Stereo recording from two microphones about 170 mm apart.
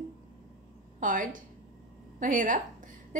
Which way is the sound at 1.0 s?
50° right (ahead or behind).